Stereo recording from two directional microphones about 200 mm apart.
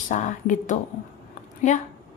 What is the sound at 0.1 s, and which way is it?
Speech, 40° left (ahead or behind).